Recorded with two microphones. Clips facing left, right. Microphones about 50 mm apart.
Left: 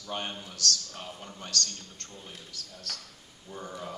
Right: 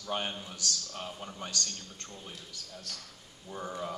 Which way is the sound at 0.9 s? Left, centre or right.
Centre.